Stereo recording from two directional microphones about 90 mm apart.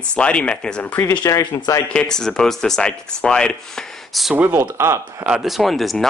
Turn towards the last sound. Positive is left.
turn(degrees=0)  # may be behind; listen again after turning